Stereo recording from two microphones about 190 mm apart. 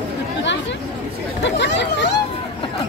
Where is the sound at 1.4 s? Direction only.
65° left (ahead or behind).